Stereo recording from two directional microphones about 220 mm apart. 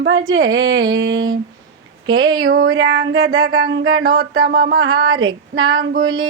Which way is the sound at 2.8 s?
55° right (ahead or behind).